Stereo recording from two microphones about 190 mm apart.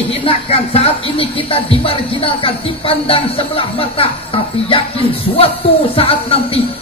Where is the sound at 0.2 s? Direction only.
30° left (ahead or behind).